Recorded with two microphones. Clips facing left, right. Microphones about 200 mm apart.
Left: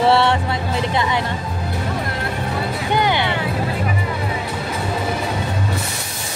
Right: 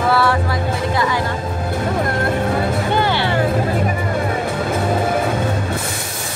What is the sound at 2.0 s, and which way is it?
Music, 50° right (ahead or behind).